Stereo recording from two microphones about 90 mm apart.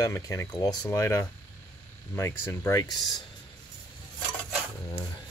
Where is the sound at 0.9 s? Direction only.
30° left (ahead or behind).